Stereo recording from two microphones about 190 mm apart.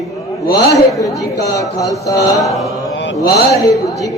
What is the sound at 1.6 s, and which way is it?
Speech, 15° left (ahead or behind).